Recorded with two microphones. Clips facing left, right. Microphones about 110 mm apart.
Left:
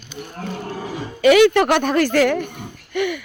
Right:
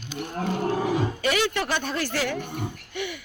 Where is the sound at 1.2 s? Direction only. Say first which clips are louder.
Left 12 dB; 90° left.